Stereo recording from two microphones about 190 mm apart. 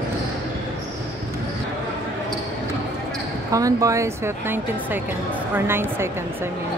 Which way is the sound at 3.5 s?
15° right (ahead or behind).